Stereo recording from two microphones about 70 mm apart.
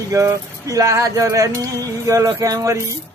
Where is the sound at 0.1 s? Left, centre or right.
Right.